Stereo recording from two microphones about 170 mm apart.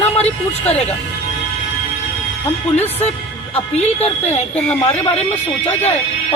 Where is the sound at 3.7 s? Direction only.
40° left (ahead or behind).